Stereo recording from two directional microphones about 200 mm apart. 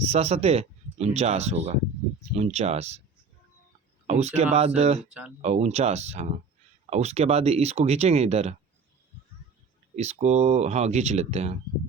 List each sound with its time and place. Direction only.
0.0 s speech: 30° right (ahead or behind)
4.0 s speech: 35° right (ahead or behind)
9.9 s speech: 35° right (ahead or behind)